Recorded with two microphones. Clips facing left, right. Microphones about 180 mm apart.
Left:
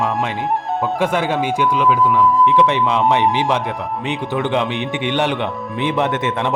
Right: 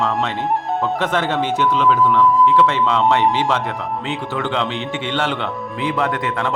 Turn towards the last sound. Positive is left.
turn(degrees=20)  # may be behind; listen again after turning